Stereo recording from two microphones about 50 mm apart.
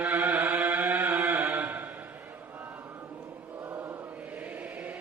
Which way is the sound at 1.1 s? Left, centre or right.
Right.